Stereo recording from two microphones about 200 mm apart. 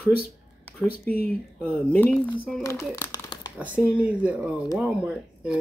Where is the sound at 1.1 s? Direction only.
10° left (ahead or behind).